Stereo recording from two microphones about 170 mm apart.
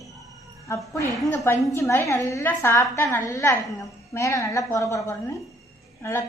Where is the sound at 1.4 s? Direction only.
15° left (ahead or behind).